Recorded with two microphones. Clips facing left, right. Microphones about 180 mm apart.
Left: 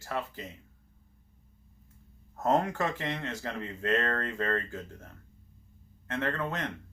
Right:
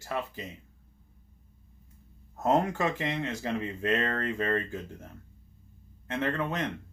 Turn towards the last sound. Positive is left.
turn(degrees=-15)  # may be behind; listen again after turning